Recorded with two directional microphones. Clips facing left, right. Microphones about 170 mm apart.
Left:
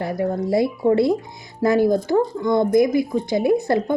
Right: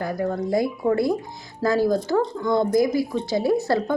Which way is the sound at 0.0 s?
25° left (ahead or behind).